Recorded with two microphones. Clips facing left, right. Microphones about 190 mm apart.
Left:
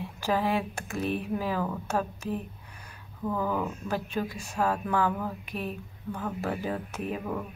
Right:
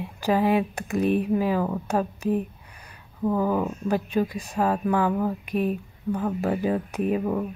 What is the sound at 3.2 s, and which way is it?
Speech, 20° right (ahead or behind).